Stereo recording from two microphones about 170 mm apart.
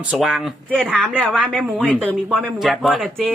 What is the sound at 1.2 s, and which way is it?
Speech, 5° right (ahead or behind).